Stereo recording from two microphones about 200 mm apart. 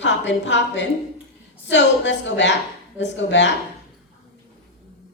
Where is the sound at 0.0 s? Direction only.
65° left (ahead or behind).